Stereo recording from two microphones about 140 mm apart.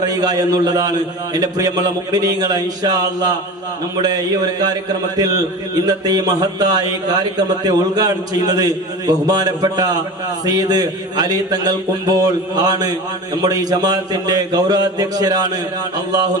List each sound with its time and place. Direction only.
0.0 s a man's voice: 25° right (ahead or behind)